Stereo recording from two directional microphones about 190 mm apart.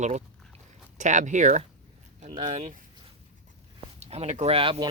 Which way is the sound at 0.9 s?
40° right (ahead or behind).